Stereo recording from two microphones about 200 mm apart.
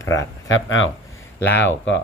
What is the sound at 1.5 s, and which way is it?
Speech, 65° left (ahead or behind).